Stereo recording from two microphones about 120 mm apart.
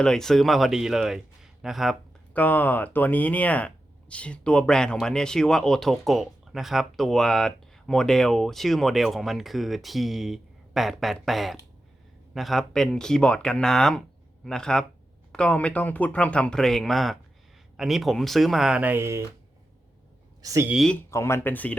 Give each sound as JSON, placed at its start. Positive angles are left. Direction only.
{"t": 0.0, "sound": "speech", "side_deg": 5}
{"t": 2.3, "sound": "speech", "side_deg": 15}
{"t": 20.4, "sound": "speech", "side_deg": -30}
{"t": 20.7, "sound": "speech", "side_deg": 5}
{"t": 21.1, "sound": "speech", "side_deg": 25}